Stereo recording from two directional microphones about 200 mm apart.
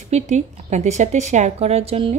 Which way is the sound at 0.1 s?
35° right (ahead or behind).